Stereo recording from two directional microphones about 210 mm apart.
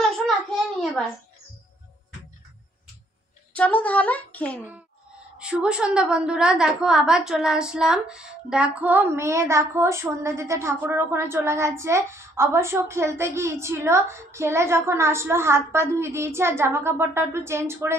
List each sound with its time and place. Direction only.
3.5 s speech: 5° left (ahead or behind)
5.4 s a woman's voice: 5° right (ahead or behind)